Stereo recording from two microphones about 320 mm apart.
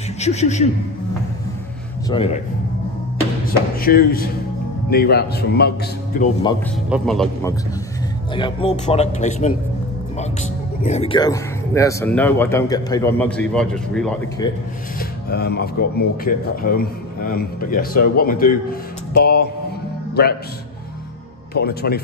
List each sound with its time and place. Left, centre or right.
0.2 s speech: left
2.0 s speech: centre
3.8 s speech: left
6.9 s speech: centre
8.4 s speech: centre
10.8 s speech: left; by 14.1 s centre
14.4 s speech: centre
15.0 s speech: left
21.5 s speech: left